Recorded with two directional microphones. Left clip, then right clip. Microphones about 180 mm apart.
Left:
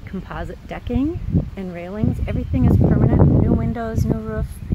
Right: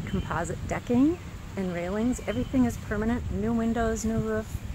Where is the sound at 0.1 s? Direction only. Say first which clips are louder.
Even; 45° left (ahead or behind).